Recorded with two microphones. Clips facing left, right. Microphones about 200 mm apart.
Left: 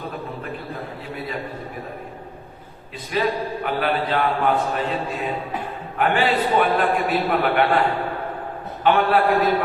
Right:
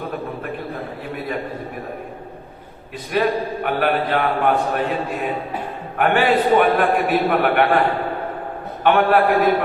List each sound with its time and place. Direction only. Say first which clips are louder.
3.1 s a man's voice: right 3 dB; 60° right (ahead or behind)
8.8 s a man's voice: right 2 dB; 55° right (ahead or behind)